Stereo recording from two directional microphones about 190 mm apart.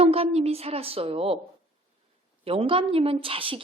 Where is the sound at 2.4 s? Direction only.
30° right (ahead or behind).